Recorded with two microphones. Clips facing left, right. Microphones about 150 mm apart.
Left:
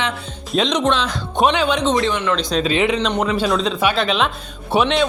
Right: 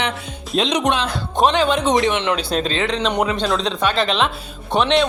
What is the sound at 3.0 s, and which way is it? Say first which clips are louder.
Speech: even; 5° right (ahead or behind).